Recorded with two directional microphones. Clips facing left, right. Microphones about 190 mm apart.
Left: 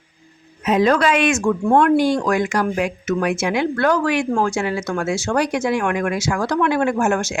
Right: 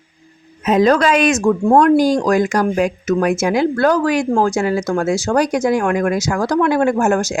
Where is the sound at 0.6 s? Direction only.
40° right (ahead or behind).